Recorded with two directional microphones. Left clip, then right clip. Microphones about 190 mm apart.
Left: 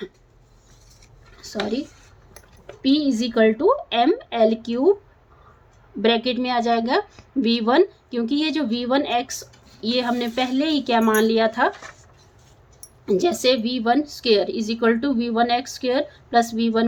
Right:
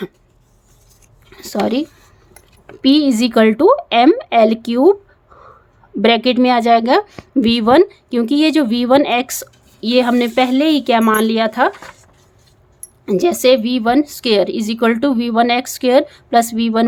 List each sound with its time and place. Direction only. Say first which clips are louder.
1.4 s speech: right 8 dB; 55° right (ahead or behind)
6.0 s a woman's voice: right 8 dB; 40° right (ahead or behind)
13.1 s a woman's voice: right 7 dB; 30° right (ahead or behind)